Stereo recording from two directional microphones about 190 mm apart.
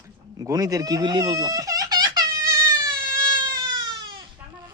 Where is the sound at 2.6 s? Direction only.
20° right (ahead or behind).